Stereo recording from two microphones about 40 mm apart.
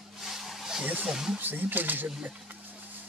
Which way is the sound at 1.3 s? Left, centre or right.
Right.